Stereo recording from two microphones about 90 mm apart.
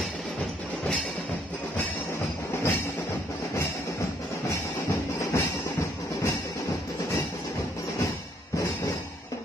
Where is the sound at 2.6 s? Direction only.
25° left (ahead or behind).